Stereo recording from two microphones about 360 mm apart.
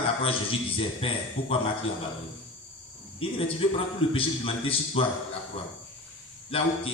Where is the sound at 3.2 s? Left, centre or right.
Centre.